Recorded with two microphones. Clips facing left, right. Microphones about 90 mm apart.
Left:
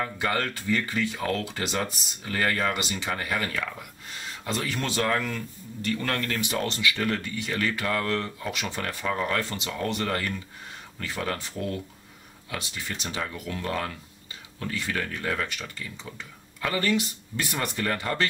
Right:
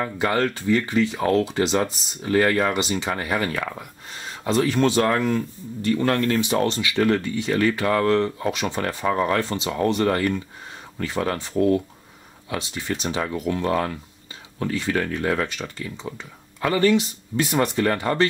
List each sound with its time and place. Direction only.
0.2 s speech: 20° right (ahead or behind)